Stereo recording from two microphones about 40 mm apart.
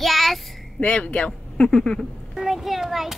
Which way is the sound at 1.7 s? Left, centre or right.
Left.